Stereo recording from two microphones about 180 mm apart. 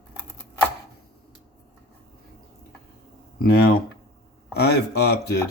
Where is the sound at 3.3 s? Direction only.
60° left (ahead or behind).